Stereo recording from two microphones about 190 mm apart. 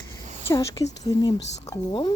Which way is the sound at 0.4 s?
15° left (ahead or behind).